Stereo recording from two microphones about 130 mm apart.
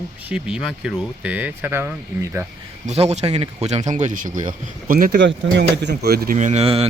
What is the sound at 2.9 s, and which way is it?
Speech, 60° right (ahead or behind).